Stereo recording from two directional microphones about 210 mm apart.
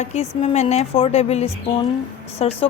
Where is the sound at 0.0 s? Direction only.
30° left (ahead or behind).